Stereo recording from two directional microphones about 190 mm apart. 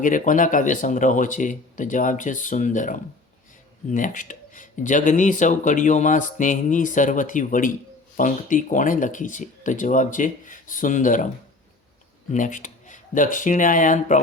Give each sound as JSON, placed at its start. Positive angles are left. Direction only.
{"t": 0.0, "sound": "speech", "side_deg": 45}
{"t": 12.3, "sound": "speech", "side_deg": 40}